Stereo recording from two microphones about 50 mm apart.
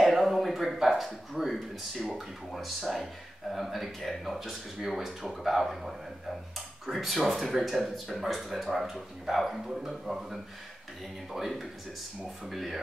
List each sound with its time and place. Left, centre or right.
0.0 s speech: centre